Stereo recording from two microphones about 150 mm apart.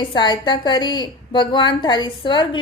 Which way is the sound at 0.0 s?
30° left (ahead or behind).